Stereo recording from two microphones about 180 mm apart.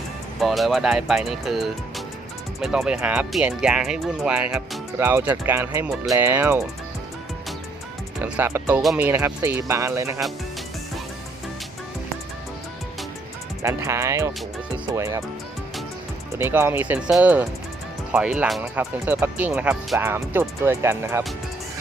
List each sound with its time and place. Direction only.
0.3 s speech: centre (ahead or behind)
8.2 s speech: 10° right (ahead or behind)
13.6 s speech: 15° right (ahead or behind)
16.3 s speech: 15° right (ahead or behind)
18.6 s speech: 15° right (ahead or behind)